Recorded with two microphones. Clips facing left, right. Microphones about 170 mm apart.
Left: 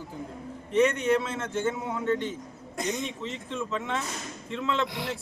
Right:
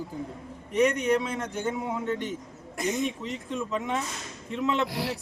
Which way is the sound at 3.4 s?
10° right (ahead or behind).